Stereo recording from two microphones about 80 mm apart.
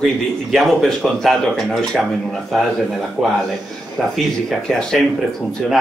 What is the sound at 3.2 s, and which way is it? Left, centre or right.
Speech, centre.